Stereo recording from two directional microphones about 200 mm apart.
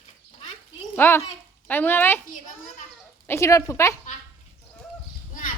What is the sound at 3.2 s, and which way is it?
Speech, 15° left (ahead or behind).